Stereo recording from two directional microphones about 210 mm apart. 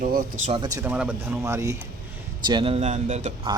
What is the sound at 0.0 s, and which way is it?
Speech, 40° right (ahead or behind).